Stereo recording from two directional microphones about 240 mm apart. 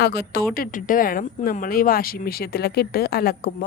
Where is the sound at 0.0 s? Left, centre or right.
Left.